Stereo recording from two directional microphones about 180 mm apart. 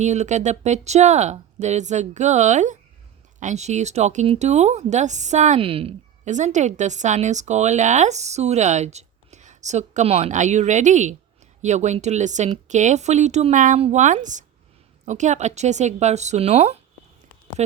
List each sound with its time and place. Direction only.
0.0 s speech: 40° right (ahead or behind)